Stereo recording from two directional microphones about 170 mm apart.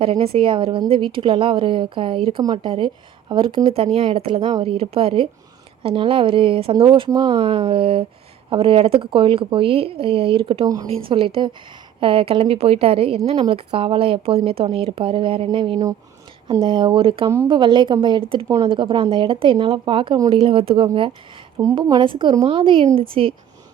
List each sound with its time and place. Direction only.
0.0 s a woman's voice: 35° right (ahead or behind)
17.2 s speech: 15° right (ahead or behind)
17.5 s a woman's voice: 25° right (ahead or behind)